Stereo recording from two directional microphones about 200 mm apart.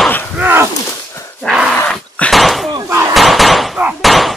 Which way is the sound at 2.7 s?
15° right (ahead or behind).